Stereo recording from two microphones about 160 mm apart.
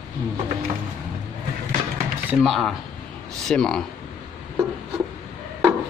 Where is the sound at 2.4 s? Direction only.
Centre (ahead or behind).